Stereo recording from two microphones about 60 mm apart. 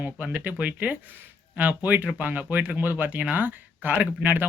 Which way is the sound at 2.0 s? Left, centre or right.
Right.